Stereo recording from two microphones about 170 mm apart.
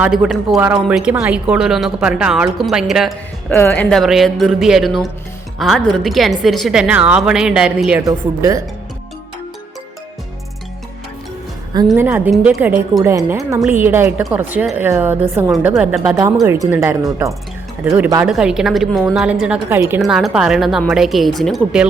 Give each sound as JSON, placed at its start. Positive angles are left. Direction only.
{"t": 0.1, "sound": "speech", "side_deg": 0}
{"t": 3.5, "sound": "speech", "side_deg": 15}
{"t": 8.0, "sound": "a woman's voice", "side_deg": -20}
{"t": 11.9, "sound": "a woman's voice", "side_deg": -10}